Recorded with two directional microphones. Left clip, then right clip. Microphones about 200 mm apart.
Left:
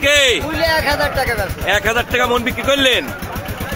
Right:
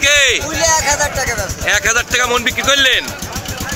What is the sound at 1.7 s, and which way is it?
A man's voice, 15° left (ahead or behind).